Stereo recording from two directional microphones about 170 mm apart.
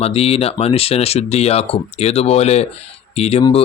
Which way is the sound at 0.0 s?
35° left (ahead or behind).